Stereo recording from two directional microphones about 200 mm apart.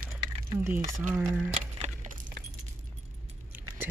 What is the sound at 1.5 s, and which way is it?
Keys jangling, 35° right (ahead or behind).